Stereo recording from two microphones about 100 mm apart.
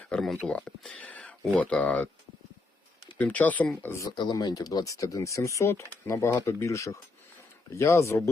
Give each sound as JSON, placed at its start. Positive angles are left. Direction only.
{"t": 0.1, "sound": "speech", "side_deg": 5}
{"t": 3.2, "sound": "speech", "side_deg": 15}
{"t": 4.1, "sound": "speech", "side_deg": 45}